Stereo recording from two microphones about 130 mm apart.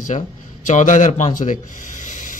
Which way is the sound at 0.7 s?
70° left (ahead or behind).